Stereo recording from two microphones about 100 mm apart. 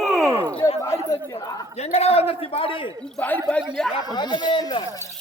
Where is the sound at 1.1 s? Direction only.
40° left (ahead or behind).